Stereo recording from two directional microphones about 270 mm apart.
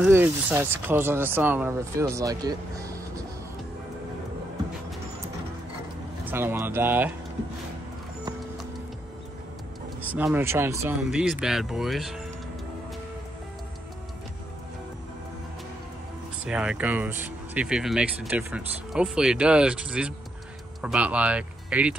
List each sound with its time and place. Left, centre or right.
0.0 s speech: centre
6.2 s speech: centre
10.1 s speech: centre
16.4 s speech: centre